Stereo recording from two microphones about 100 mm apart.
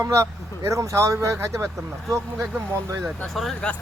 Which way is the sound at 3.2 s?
Centre (ahead or behind).